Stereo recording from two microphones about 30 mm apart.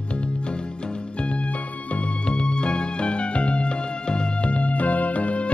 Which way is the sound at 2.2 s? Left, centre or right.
Left.